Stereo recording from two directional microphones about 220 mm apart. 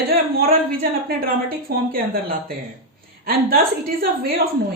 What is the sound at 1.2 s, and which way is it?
Speech, 40° right (ahead or behind).